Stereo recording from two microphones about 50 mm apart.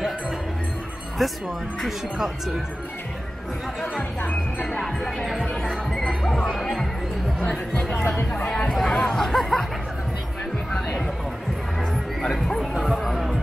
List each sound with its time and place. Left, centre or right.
1.2 s speech: centre
4.2 s speech: left
4.7 s music: centre
7.4 s speech: left
8.5 s chatter: centre
11.9 s music: centre